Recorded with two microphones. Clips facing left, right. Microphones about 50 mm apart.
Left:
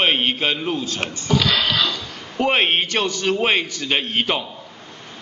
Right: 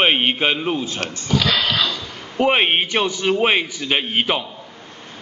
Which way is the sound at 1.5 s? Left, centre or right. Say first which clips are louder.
Even; centre.